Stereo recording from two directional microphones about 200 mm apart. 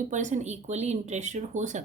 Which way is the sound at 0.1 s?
35° right (ahead or behind).